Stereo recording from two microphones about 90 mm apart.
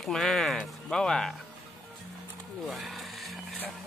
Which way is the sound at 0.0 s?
5° left (ahead or behind).